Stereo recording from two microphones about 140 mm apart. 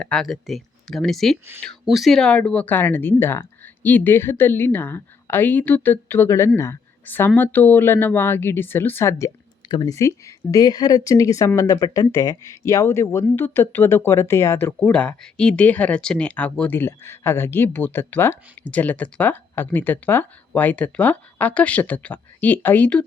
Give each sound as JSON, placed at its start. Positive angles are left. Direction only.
{"t": 0.0, "sound": "speech", "side_deg": 5}
{"t": 9.6, "sound": "speech", "side_deg": 35}
{"t": 9.9, "sound": "speech", "side_deg": 20}